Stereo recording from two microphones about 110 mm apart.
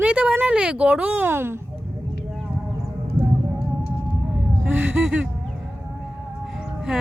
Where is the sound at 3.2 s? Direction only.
50° right (ahead or behind).